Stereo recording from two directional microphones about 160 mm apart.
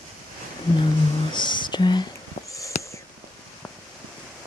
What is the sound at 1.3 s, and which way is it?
Whispering, 30° left (ahead or behind).